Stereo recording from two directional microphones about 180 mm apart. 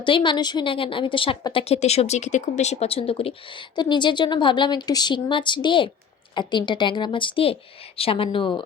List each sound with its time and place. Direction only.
0.0 s a woman's voice: 25° left (ahead or behind)